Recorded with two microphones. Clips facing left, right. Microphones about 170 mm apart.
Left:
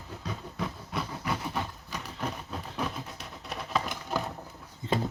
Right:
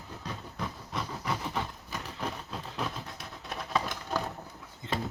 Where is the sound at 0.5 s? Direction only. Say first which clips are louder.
Left 2 dB; 5° left (ahead or behind).